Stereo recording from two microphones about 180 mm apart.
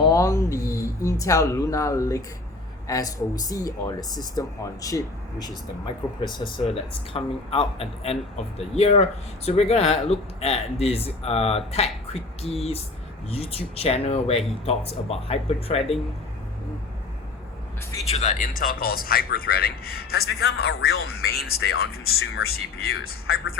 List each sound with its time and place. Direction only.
0.0 s speech: 20° left (ahead or behind); by 16.0 s 35° left (ahead or behind)
18.1 s speech: 40° left (ahead or behind); by 23.6 s 60° left (ahead or behind)